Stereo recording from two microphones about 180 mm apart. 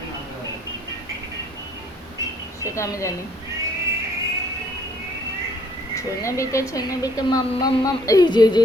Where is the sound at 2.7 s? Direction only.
15° left (ahead or behind).